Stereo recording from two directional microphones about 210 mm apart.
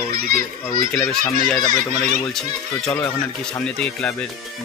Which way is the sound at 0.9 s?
5° left (ahead or behind).